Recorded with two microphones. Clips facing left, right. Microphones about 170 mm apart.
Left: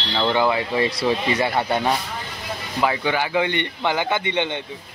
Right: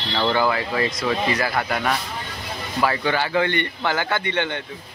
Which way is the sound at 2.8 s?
15° left (ahead or behind).